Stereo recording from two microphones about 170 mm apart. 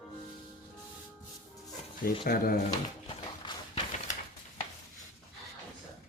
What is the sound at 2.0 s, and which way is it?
Speech, 60° left (ahead or behind).